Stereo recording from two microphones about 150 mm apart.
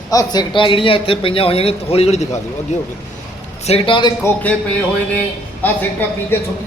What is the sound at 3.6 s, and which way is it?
Speech, 40° left (ahead or behind).